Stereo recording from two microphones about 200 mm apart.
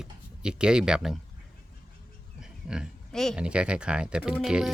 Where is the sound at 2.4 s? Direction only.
5° right (ahead or behind).